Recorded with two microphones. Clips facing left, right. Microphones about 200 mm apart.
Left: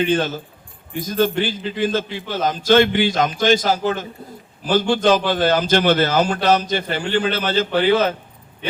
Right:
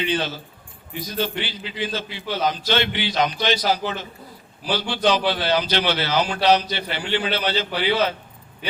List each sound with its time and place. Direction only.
0.0 s a man's voice: 50° left (ahead or behind)